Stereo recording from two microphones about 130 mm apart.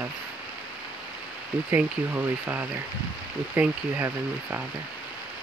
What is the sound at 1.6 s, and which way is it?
Speech, 15° right (ahead or behind).